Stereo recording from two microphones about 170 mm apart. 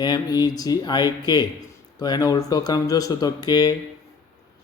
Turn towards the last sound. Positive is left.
turn(degrees=25)  # may be behind; listen again after turning